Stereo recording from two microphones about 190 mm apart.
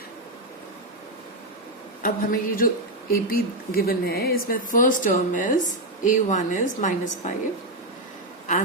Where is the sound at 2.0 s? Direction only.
50° left (ahead or behind).